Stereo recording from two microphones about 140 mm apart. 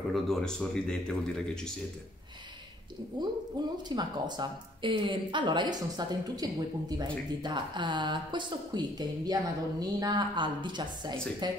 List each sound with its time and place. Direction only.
0.1 s speech: 5° left (ahead or behind)
3.1 s speech: 30° right (ahead or behind)